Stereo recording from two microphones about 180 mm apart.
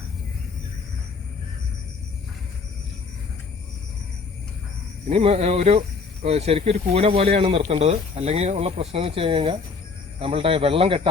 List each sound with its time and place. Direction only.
5.0 s speech: 35° right (ahead or behind)